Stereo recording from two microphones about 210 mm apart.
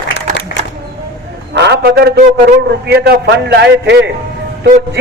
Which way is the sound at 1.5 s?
55° right (ahead or behind).